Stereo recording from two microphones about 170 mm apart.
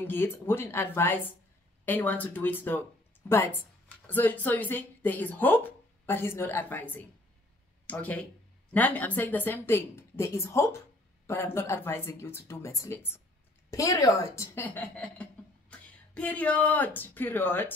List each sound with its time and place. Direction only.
0.0 s a woman's voice: 10° left (ahead or behind)